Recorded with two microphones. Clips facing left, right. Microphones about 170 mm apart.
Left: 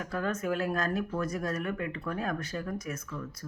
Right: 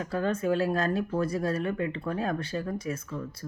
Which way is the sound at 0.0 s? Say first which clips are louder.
Right 4 dB; 30° right (ahead or behind).